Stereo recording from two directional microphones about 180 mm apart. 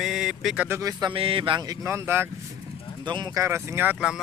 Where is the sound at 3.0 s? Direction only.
25° right (ahead or behind); by 4.2 s 5° right (ahead or behind).